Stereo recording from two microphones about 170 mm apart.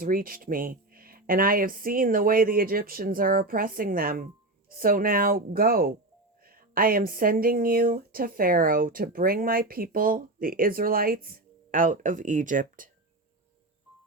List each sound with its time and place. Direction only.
0.0 s speech: 55° right (ahead or behind)